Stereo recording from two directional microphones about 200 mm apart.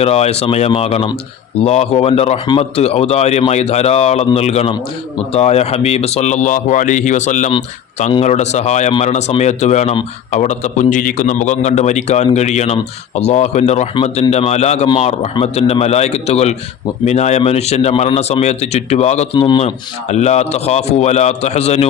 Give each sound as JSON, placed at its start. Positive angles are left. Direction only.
{"t": 0.0, "sound": "speech", "side_deg": 30}